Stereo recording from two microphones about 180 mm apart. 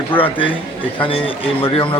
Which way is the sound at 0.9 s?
30° left (ahead or behind).